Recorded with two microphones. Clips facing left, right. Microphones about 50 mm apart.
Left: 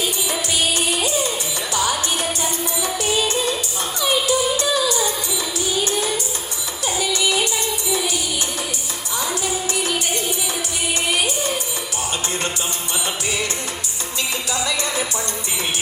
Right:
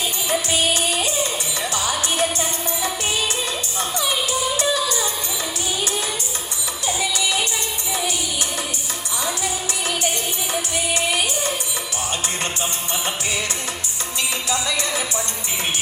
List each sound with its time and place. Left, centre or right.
0.3 s music: right
2.4 s music: right